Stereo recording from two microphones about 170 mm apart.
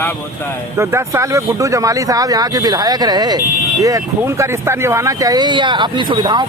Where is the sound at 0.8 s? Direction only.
15° right (ahead or behind).